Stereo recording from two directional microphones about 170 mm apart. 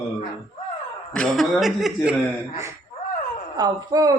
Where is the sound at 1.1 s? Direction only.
5° left (ahead or behind).